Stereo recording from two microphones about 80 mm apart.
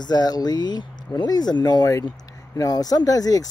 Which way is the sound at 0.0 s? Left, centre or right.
Left.